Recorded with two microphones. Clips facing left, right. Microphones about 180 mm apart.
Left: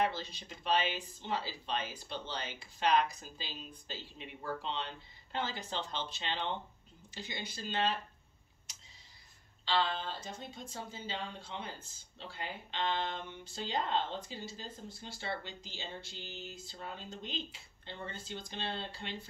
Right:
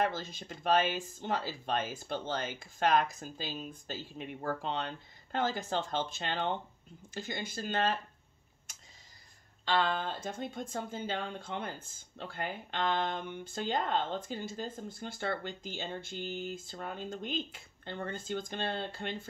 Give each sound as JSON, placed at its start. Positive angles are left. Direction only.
{"t": 0.0, "sound": "speech", "side_deg": -45}
{"t": 8.7, "sound": "a sound", "side_deg": -50}
{"t": 9.7, "sound": "speech", "side_deg": -55}